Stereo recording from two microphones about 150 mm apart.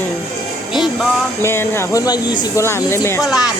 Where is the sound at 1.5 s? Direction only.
15° left (ahead or behind).